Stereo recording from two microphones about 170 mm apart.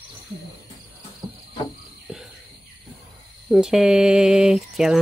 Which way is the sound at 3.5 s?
5° right (ahead or behind).